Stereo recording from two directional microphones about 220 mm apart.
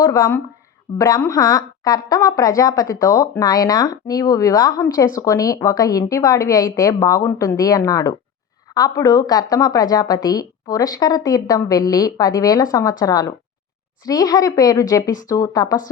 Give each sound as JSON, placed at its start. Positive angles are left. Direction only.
{"t": 0.0, "sound": "a woman's voice", "side_deg": 15}